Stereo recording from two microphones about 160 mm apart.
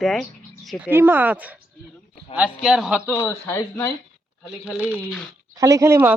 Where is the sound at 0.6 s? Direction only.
10° right (ahead or behind).